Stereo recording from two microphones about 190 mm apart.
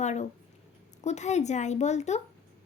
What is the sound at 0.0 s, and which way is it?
A woman's voice, 40° left (ahead or behind).